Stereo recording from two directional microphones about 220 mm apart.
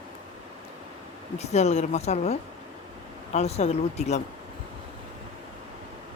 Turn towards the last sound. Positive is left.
turn(degrees=30)  # may be behind; listen again after turning